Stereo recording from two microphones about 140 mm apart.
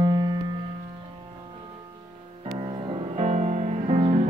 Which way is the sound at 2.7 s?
35° right (ahead or behind).